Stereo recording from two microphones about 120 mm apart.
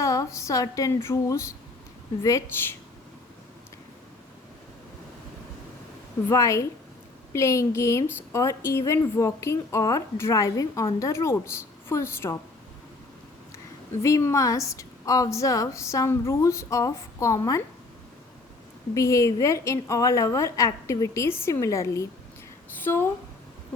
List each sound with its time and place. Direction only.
0.0 s a woman's voice: 30° left (ahead or behind)
6.2 s a woman's voice: 25° left (ahead or behind)
14.0 s a woman's voice: 25° left (ahead or behind)
18.9 s a woman's voice: 25° left (ahead or behind)